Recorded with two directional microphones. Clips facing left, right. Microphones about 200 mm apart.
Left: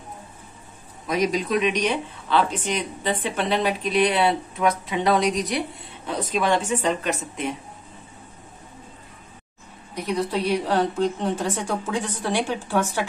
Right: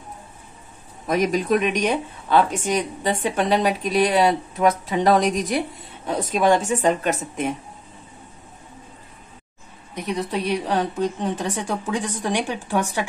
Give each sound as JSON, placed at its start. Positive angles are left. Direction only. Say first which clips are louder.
{"t": 1.0, "sound": "speech", "louder": "right 2 dB", "side_deg": -50}
{"t": 9.9, "sound": "a woman's voice", "louder": "left 1 dB", "side_deg": -20}